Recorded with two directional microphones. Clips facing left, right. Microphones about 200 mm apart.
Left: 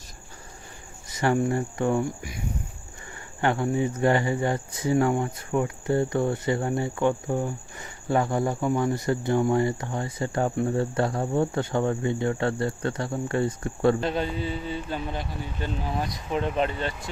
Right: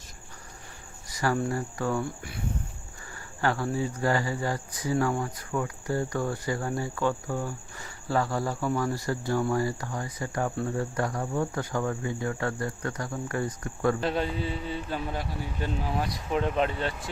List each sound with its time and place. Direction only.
1.1 s speech: 25° left (ahead or behind)
3.4 s speech: 20° left (ahead or behind)
14.0 s a man's voice: centre (ahead or behind)